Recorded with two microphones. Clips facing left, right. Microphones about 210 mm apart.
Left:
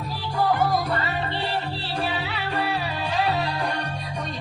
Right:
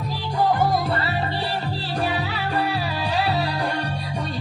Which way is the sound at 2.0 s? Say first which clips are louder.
Right 3 dB; 45° right (ahead or behind).